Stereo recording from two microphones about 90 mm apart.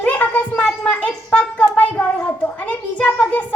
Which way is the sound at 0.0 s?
20° left (ahead or behind).